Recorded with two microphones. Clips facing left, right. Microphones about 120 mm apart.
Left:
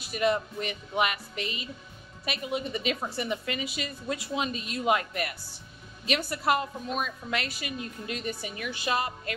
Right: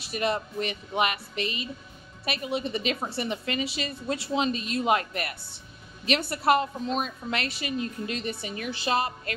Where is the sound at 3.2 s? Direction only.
25° right (ahead or behind).